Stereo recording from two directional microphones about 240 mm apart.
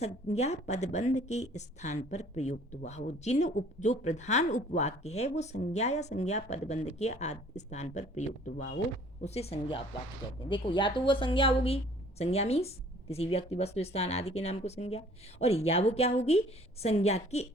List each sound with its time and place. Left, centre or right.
0.0 s speech: left